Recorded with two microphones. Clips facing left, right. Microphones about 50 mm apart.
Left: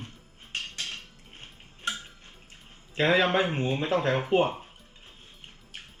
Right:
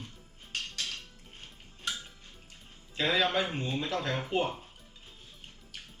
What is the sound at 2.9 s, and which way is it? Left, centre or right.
Speech, left.